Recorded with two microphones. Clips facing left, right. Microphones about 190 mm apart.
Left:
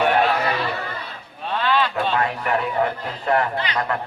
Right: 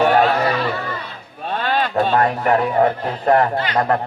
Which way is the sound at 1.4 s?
45° right (ahead or behind).